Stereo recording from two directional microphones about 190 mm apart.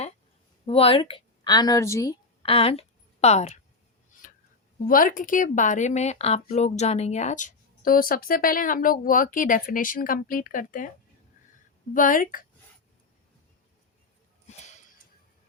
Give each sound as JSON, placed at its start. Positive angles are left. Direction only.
{"t": 0.6, "sound": "a woman's voice", "side_deg": 30}
{"t": 2.4, "sound": "a woman's voice", "side_deg": 30}
{"t": 4.1, "sound": "a sound", "side_deg": 45}
{"t": 4.9, "sound": "speech", "side_deg": 45}
{"t": 11.9, "sound": "speech", "side_deg": 45}
{"t": 14.4, "sound": "a sound", "side_deg": 35}